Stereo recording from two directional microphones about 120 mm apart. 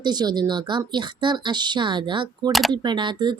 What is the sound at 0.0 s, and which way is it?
Speech, 35° right (ahead or behind).